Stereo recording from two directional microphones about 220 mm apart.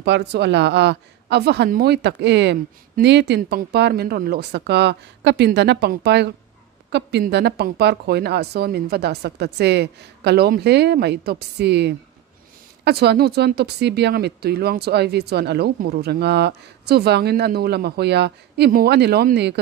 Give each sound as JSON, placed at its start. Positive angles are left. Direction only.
{"t": 0.0, "sound": "speech", "side_deg": -50}